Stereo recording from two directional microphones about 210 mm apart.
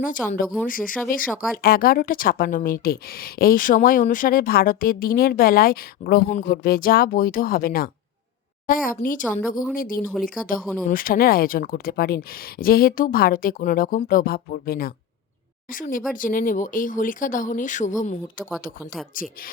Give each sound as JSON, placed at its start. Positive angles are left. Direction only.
{"t": 0.0, "sound": "a woman's voice", "side_deg": 40}